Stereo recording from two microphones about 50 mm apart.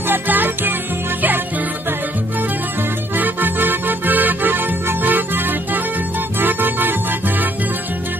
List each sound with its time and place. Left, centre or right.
0.1 s music: right
3.2 s music: right